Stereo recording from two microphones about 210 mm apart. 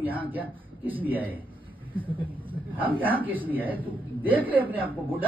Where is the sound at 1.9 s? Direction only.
25° right (ahead or behind).